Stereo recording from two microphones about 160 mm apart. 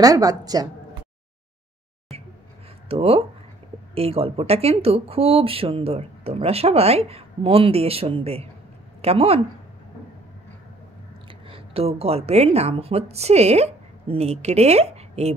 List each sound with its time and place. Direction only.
0.0 s a woman's voice: 20° right (ahead or behind)
2.9 s speech: 40° right (ahead or behind)
11.2 s a woman's voice: 35° right (ahead or behind)